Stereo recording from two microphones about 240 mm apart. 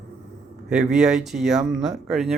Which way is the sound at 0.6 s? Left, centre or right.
Centre.